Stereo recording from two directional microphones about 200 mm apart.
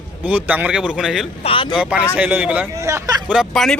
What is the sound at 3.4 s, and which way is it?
Speech, centre (ahead or behind).